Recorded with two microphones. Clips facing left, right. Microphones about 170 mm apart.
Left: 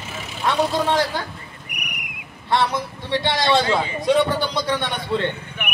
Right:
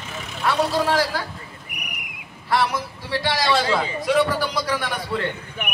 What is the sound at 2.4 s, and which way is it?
A man's voice, 25° left (ahead or behind).